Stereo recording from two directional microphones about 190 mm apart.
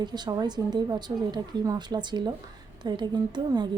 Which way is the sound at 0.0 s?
20° right (ahead or behind).